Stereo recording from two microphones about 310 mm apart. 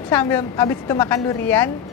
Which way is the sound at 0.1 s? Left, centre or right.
Centre.